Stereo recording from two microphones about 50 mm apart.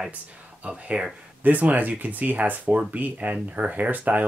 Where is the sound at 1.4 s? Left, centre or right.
Right.